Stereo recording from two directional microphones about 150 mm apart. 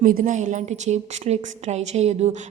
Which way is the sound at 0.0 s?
60° right (ahead or behind).